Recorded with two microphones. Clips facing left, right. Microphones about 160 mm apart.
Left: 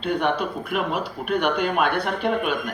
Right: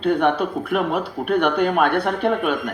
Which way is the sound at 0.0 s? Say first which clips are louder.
Right 5 dB; 50° right (ahead or behind).